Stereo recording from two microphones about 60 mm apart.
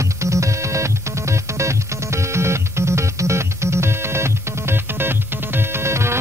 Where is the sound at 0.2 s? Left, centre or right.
Right.